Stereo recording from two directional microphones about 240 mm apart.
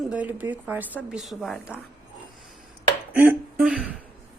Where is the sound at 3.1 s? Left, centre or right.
Centre.